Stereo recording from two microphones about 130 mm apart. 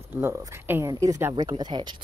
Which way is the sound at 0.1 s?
20° right (ahead or behind).